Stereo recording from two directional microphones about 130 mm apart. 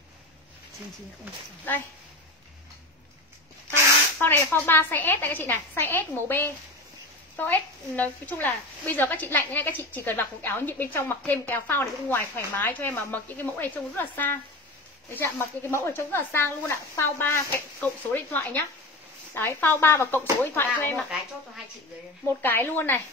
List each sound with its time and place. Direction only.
4.2 s a woman's voice: 15° left (ahead or behind)
22.4 s a woman's voice: 15° left (ahead or behind)